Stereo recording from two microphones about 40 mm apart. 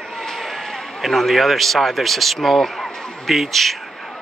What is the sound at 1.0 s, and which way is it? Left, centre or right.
Speech, centre.